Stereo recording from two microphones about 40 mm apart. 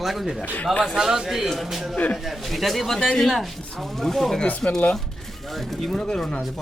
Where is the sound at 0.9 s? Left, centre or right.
Centre.